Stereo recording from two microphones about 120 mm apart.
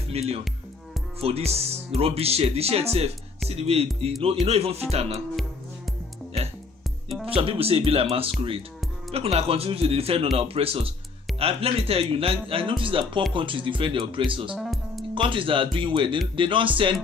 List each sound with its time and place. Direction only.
0.1 s speech: 60° right (ahead or behind)
7.2 s speech: 50° right (ahead or behind)
14.5 s music: centre (ahead or behind)
15.1 s speech: 45° right (ahead or behind)